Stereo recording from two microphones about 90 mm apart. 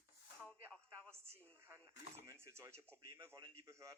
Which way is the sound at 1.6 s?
25° right (ahead or behind).